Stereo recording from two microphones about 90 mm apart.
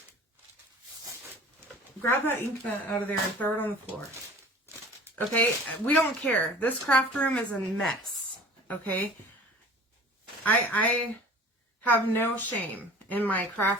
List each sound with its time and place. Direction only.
2.0 s a woman's voice: 25° left (ahead or behind)
5.1 s speech: 20° left (ahead or behind); by 7.9 s 5° left (ahead or behind)
8.6 s speech: 20° left (ahead or behind)
10.4 s a woman's voice: 20° left (ahead or behind)